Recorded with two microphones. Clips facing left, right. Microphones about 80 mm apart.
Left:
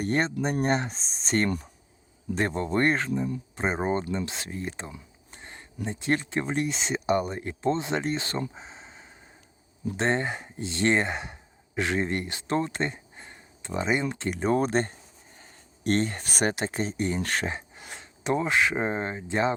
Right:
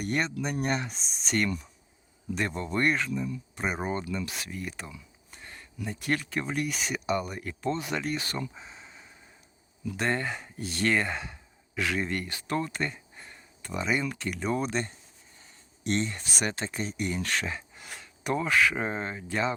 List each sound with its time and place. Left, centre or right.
0.0 s speech: left
3.5 s speech: left
15.4 s a sound: left
16.6 s speech: left